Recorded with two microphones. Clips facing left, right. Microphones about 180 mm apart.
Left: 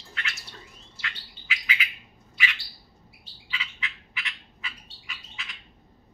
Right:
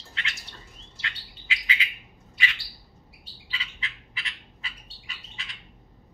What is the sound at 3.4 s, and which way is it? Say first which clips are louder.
Frog: left 2 dB; 35° right (ahead or behind).